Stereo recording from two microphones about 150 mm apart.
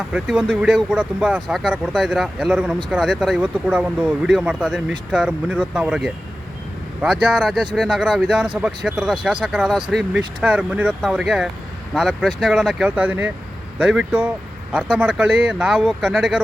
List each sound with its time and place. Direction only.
0.1 s speech: 5° right (ahead or behind)